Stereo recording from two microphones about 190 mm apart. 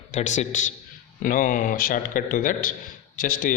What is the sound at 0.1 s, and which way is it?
A man's voice, 40° left (ahead or behind).